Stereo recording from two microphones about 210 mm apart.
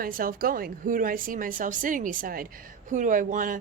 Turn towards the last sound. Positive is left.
turn(degrees=-40)  # may be behind; listen again after turning